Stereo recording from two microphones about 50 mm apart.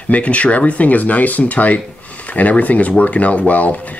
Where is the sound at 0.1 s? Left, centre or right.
Left.